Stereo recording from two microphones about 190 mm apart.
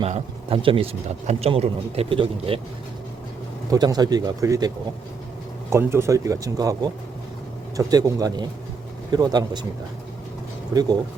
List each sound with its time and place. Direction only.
0.0 s speech: 30° right (ahead or behind)
3.7 s speech: 20° right (ahead or behind)
5.7 s speech: 15° right (ahead or behind)